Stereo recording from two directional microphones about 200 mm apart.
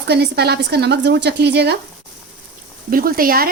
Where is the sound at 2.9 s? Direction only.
45° right (ahead or behind).